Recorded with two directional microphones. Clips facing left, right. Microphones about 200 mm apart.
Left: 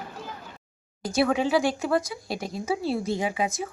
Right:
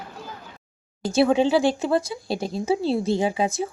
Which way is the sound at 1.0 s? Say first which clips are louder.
Right 5 dB; 25° right (ahead or behind).